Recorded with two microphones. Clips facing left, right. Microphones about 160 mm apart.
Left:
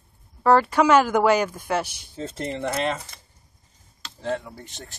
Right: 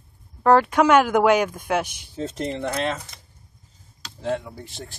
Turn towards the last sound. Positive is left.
turn(degrees=-5)  # may be behind; listen again after turning